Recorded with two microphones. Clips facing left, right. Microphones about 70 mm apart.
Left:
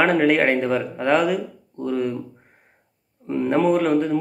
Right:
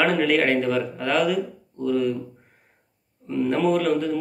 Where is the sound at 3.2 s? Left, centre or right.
Left.